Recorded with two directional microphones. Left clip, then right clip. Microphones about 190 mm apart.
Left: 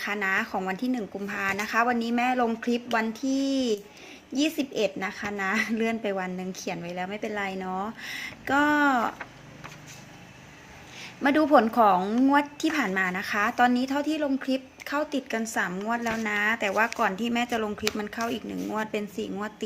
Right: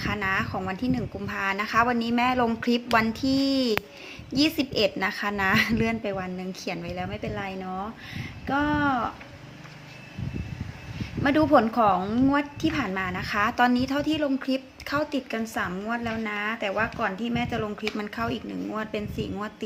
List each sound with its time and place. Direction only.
0.0 s speech: 15° left (ahead or behind)
11.2 s speech: 15° left (ahead or behind)
17.9 s speech: 5° left (ahead or behind)